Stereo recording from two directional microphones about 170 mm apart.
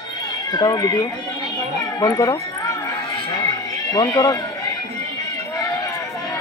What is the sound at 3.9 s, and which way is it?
Speech, 20° left (ahead or behind).